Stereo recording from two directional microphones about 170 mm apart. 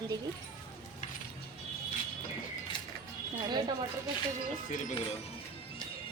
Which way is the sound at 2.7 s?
25° left (ahead or behind).